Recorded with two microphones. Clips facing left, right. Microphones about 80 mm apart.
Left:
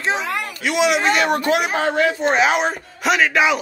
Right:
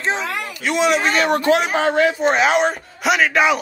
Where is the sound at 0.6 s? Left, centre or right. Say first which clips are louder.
Right 1 dB; right.